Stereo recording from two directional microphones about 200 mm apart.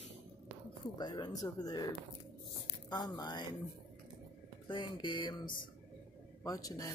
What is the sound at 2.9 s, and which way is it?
Speech, 20° left (ahead or behind).